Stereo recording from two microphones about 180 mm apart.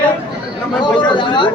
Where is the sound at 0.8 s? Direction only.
25° left (ahead or behind).